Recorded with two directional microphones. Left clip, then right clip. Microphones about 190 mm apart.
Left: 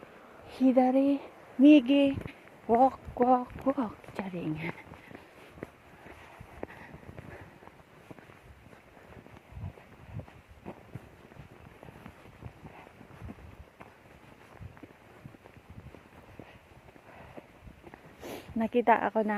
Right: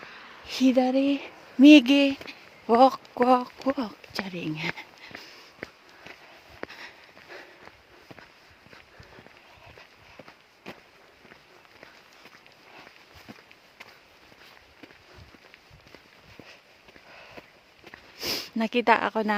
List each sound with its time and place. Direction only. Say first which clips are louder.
0.4 s speech: right 2 dB; 35° right (ahead or behind)
2.6 s speech: right 5 dB; 45° right (ahead or behind)
3.6 s speech: right 2 dB; 25° right (ahead or behind)
4.3 s speech: right 4 dB; 35° right (ahead or behind)
18.2 s speech: right 6 dB; 45° right (ahead or behind)